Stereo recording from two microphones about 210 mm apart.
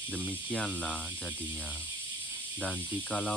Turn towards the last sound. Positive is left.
turn(degrees=5)  # may be behind; listen again after turning